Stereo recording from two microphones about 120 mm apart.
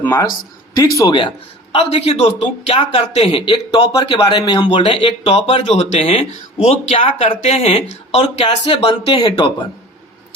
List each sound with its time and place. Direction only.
0.0 s speech: 20° left (ahead or behind)
1.7 s speech: 55° left (ahead or behind)
7.3 s speech: 65° left (ahead or behind)
8.2 s speech: 50° left (ahead or behind)